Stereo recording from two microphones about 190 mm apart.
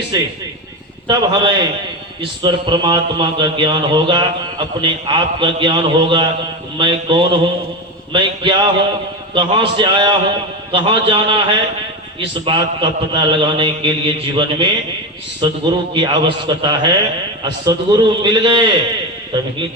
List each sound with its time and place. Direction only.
0.1 s a man's voice: 20° right (ahead or behind)
12.5 s a man's voice: 25° right (ahead or behind)